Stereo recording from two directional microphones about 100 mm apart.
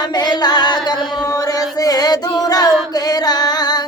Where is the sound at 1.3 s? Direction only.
35° left (ahead or behind).